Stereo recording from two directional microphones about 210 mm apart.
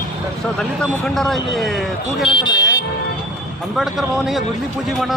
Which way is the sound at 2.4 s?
20° left (ahead or behind).